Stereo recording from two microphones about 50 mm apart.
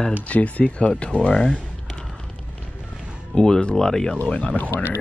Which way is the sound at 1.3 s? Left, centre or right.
Centre.